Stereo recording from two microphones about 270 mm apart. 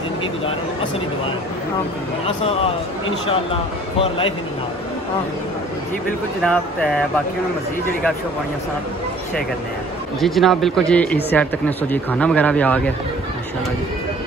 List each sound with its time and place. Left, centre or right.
2.2 s a man's voice: left
6.4 s speech: centre
10.2 s speech: centre